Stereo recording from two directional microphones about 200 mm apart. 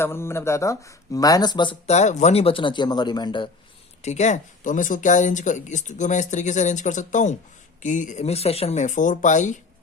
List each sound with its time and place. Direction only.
0.0 s speech: 10° left (ahead or behind)
1.9 s a man's voice: 35° left (ahead or behind)
4.0 s speech: 35° left (ahead or behind)